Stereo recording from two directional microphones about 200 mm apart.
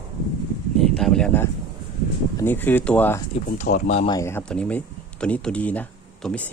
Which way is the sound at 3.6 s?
35° left (ahead or behind).